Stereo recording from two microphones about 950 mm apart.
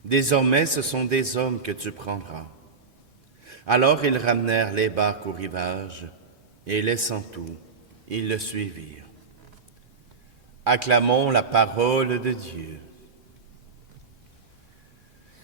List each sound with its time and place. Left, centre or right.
0.1 s speech: right
3.4 s speech: right
6.7 s speech: right
10.6 s speech: right